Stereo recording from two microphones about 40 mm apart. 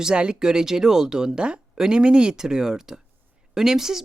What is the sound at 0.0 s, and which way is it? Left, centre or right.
Speech, right.